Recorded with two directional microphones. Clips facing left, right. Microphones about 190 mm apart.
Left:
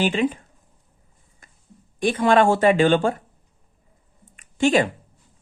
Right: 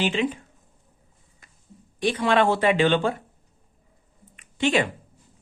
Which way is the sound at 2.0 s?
50° left (ahead or behind).